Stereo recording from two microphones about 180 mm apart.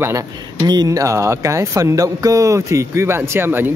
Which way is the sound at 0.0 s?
15° right (ahead or behind).